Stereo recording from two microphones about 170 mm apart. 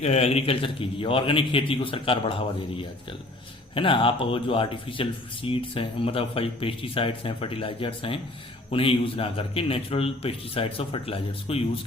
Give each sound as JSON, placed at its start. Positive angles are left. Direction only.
{"t": 0.0, "sound": "speech", "side_deg": 40}